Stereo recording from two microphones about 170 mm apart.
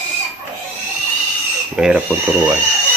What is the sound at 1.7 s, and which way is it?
Speech, 5° right (ahead or behind).